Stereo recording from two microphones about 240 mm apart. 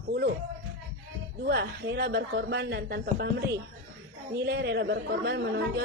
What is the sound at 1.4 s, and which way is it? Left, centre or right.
Speech, right.